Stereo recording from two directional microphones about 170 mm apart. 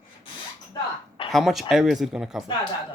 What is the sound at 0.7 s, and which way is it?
Throat clearing, 30° left (ahead or behind).